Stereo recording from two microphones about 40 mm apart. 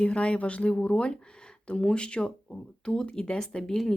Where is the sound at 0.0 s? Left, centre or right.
Left.